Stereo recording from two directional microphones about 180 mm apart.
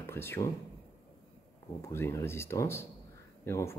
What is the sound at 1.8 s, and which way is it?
Speech, 15° left (ahead or behind).